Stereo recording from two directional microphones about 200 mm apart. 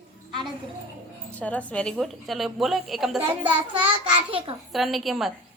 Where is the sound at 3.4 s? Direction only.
25° right (ahead or behind).